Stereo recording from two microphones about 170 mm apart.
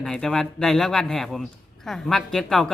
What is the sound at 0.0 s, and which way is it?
A woman's voice, 5° left (ahead or behind).